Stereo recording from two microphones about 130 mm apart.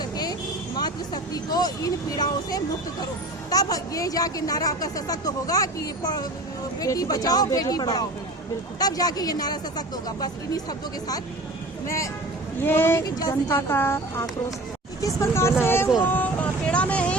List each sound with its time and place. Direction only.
0.0 s vehicle: 30° left (ahead or behind)
0.8 s a woman's voice: 30° left (ahead or behind)
12.6 s a woman's voice: 15° left (ahead or behind)
16.0 s vehicle: 15° left (ahead or behind)